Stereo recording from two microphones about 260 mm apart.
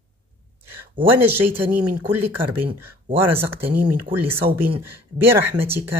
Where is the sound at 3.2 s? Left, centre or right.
Centre.